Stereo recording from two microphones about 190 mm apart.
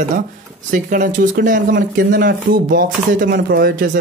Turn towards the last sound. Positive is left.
turn(degrees=-50)  # may be behind; listen again after turning